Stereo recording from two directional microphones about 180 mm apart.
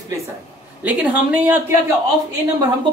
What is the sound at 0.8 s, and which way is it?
Speech, 10° right (ahead or behind).